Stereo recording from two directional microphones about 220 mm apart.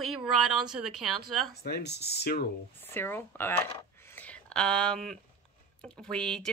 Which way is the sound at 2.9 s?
10° left (ahead or behind).